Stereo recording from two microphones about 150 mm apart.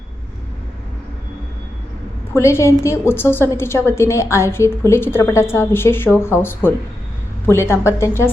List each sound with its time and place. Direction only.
2.3 s a woman's voice: 20° left (ahead or behind)